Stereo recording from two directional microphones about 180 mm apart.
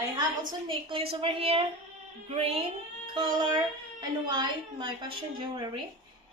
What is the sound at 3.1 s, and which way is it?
Child singing, 30° right (ahead or behind).